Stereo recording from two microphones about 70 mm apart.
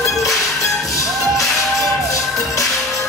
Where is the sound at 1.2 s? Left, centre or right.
Centre.